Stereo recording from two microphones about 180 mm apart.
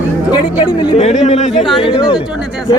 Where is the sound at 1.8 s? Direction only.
25° left (ahead or behind).